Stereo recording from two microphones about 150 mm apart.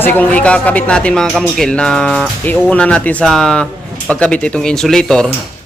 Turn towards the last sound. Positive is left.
turn(degrees=5)  # may be behind; listen again after turning